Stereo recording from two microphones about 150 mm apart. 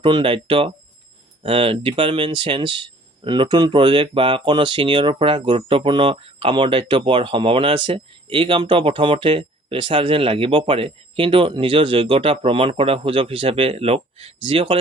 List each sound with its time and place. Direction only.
0.0 s speech: 35° right (ahead or behind)